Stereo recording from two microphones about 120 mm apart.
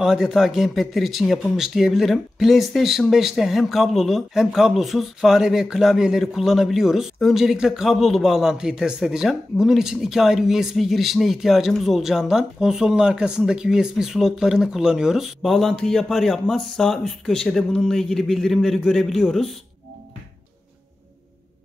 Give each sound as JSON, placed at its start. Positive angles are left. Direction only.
{"t": 0.0, "sound": "speech", "side_deg": -5}